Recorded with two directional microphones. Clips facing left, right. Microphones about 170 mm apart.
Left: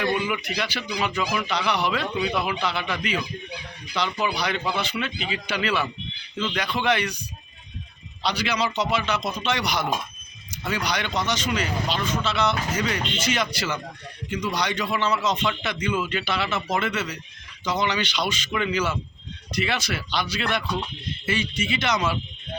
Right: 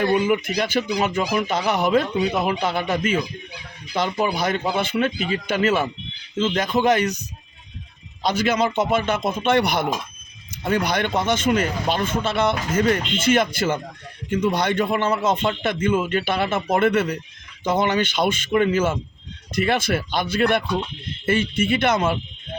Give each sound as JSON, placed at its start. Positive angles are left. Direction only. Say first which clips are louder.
{"t": 0.0, "sound": "a man's voice", "louder": "right 6 dB", "side_deg": -45}
{"t": 8.2, "sound": "a man's voice", "louder": "right 5 dB", "side_deg": -45}